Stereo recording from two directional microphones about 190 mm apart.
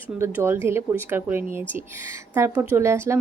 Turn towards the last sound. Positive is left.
turn(degrees=-15)  # may be behind; listen again after turning